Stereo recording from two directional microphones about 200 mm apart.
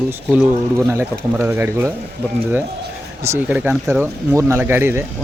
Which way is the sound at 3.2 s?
10° right (ahead or behind).